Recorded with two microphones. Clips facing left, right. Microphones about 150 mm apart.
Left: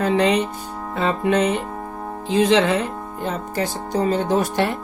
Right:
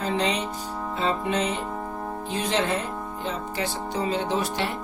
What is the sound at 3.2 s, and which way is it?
Speech, 45° left (ahead or behind).